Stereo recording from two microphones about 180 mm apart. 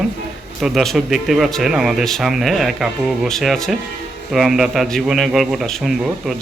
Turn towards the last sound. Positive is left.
turn(degrees=0)  # may be behind; listen again after turning